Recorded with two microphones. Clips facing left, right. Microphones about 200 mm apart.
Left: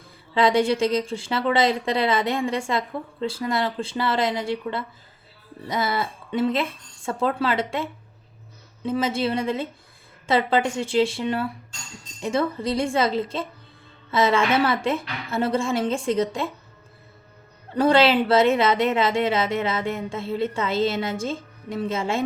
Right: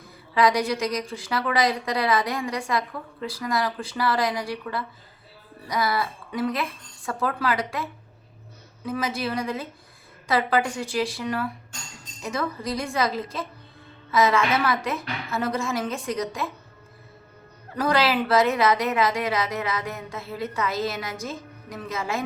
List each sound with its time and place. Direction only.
0.3 s a woman's voice: 25° left (ahead or behind)
17.7 s a woman's voice: 25° left (ahead or behind)